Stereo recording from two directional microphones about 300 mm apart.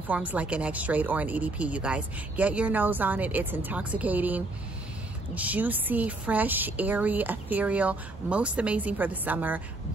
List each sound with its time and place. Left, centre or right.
0.1 s a woman's voice: centre